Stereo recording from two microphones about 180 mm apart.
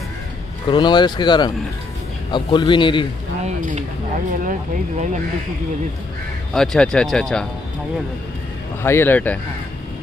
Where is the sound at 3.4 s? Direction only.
40° right (ahead or behind).